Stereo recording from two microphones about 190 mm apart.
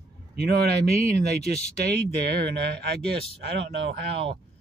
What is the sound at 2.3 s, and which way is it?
Speech, 55° right (ahead or behind).